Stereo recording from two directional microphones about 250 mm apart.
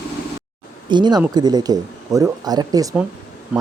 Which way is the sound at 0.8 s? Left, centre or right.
Centre.